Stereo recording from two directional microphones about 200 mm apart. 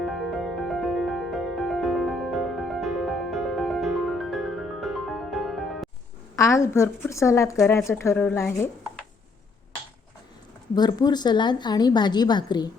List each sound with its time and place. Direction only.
0.0 s music: centre (ahead or behind)
6.3 s a woman's voice: 15° left (ahead or behind)
10.8 s a woman's voice: 20° left (ahead or behind)